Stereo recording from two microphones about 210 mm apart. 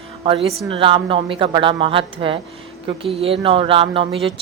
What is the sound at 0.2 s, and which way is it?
A woman's voice, 25° right (ahead or behind).